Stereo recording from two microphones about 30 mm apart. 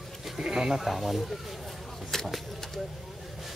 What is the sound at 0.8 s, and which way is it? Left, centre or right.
Speech, centre.